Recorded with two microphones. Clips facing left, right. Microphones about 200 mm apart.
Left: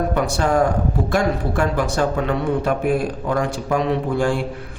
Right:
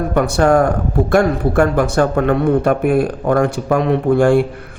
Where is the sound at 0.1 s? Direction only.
55° right (ahead or behind).